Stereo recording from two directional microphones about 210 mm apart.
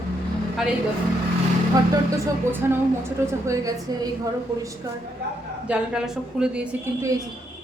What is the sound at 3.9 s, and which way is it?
Speech, 20° right (ahead or behind).